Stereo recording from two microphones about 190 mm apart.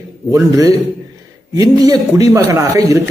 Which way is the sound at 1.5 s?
20° right (ahead or behind).